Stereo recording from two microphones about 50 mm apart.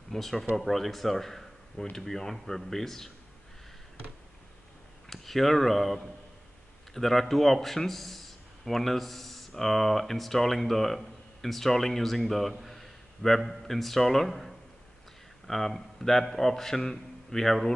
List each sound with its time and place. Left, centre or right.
0.1 s a man's voice: centre
5.1 s a man's voice: centre